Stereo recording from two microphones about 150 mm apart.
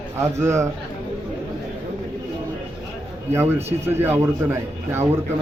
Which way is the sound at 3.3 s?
15° right (ahead or behind).